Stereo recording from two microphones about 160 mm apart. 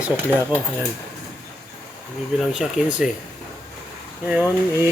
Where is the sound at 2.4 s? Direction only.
5° right (ahead or behind).